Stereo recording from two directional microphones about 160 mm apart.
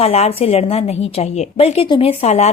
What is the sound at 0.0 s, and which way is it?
A woman's voice, 40° left (ahead or behind).